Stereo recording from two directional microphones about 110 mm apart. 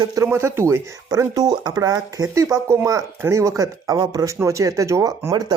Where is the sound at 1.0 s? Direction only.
35° right (ahead or behind).